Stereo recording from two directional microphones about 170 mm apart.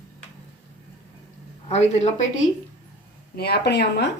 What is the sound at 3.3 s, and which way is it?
Speech, 70° left (ahead or behind).